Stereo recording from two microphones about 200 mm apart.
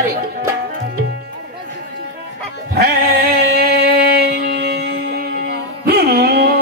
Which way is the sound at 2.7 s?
50° right (ahead or behind).